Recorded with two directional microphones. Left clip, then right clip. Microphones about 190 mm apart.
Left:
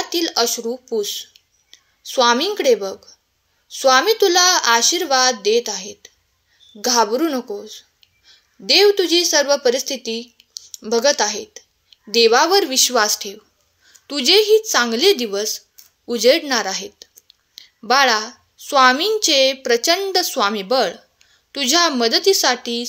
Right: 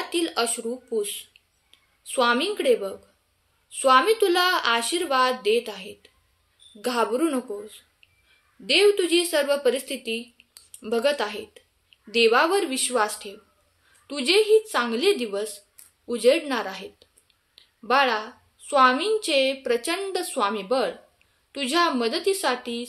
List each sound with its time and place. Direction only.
0.1 s a woman's voice: 35° left (ahead or behind)
8.6 s a woman's voice: 35° left (ahead or behind)